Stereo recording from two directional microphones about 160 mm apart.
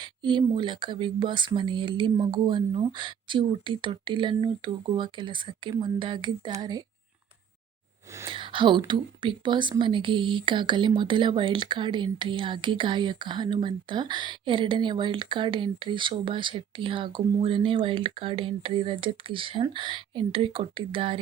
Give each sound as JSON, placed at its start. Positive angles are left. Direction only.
{"t": 0.0, "sound": "speech", "side_deg": -30}
{"t": 8.3, "sound": "speech", "side_deg": -30}